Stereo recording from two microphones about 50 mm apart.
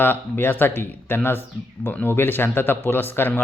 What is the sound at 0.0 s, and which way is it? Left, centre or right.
Speech, left.